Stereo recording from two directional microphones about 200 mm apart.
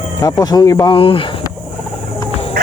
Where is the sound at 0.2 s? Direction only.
20° left (ahead or behind).